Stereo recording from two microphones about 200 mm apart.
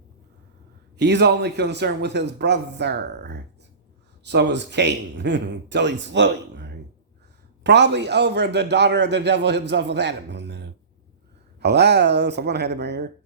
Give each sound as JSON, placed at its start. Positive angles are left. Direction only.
{"t": 0.9, "sound": "a man's voice", "side_deg": -60}